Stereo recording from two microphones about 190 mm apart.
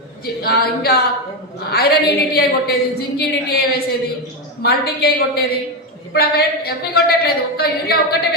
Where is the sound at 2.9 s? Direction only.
55° left (ahead or behind).